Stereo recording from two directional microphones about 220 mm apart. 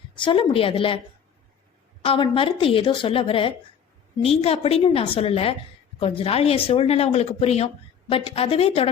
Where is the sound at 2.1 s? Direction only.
25° left (ahead or behind).